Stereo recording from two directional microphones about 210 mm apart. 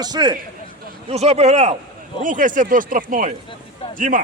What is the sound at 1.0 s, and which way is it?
Speech, 30° right (ahead or behind).